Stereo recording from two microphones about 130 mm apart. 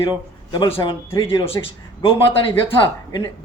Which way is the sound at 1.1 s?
20° left (ahead or behind).